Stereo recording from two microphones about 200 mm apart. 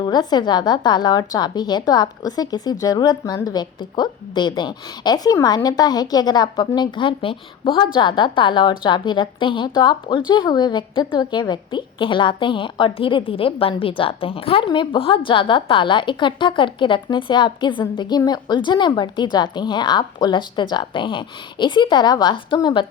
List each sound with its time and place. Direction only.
0.0 s a woman's voice: 20° left (ahead or behind)